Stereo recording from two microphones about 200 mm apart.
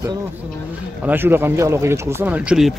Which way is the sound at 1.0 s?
10° right (ahead or behind).